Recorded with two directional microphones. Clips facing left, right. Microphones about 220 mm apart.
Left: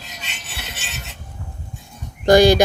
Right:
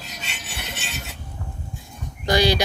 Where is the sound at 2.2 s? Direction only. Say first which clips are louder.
Left 8 dB; 50° left (ahead or behind).